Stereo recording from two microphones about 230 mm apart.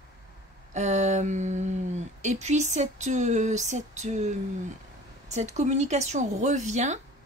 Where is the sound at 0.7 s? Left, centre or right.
Right.